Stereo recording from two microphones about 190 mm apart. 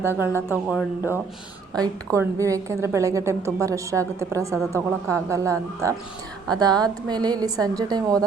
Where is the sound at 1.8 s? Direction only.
15° right (ahead or behind).